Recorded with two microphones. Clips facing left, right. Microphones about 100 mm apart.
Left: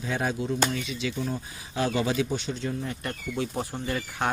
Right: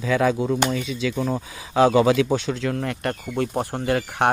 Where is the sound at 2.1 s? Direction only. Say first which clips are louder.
Right 8 dB; 90° right.